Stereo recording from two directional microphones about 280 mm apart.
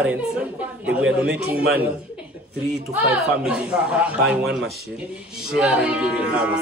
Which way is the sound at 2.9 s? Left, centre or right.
Centre.